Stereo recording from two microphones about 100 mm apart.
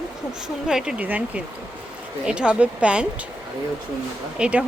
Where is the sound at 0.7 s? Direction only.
5° right (ahead or behind).